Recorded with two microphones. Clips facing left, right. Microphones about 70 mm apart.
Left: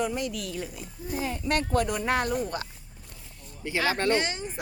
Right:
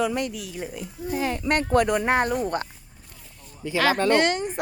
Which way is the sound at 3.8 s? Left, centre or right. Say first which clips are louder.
Right 6 dB; right.